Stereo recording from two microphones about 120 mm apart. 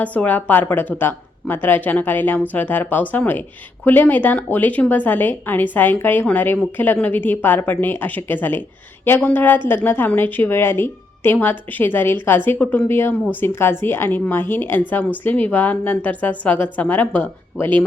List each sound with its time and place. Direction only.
0.0 s a woman's voice: 10° left (ahead or behind)